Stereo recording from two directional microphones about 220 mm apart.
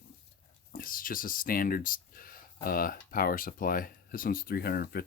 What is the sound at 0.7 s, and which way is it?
Speech, 40° left (ahead or behind).